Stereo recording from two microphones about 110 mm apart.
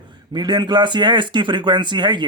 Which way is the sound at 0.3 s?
40° right (ahead or behind).